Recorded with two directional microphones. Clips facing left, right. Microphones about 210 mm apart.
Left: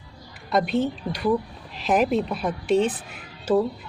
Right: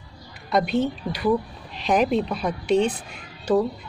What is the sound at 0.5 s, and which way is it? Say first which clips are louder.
Speech: right 1 dB; centre (ahead or behind).